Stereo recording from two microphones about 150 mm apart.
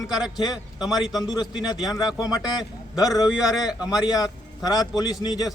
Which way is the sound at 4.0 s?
25° left (ahead or behind).